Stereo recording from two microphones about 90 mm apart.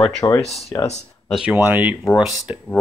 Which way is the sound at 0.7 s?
30° left (ahead or behind).